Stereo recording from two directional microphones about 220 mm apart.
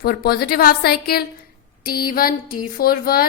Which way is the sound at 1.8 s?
40° left (ahead or behind).